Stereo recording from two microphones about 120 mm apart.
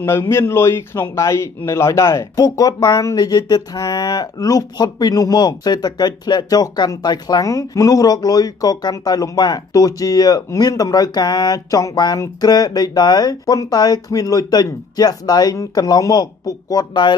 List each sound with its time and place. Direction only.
0.0 s a man's voice: 20° left (ahead or behind)